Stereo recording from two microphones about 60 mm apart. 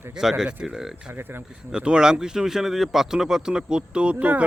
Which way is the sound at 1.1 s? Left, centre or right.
Right.